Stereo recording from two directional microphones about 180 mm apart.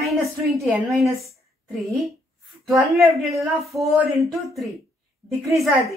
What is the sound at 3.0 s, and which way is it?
A woman's voice, centre (ahead or behind).